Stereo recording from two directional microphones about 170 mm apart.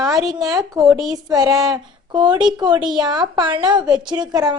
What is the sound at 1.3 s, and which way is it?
A woman's voice, 20° right (ahead or behind).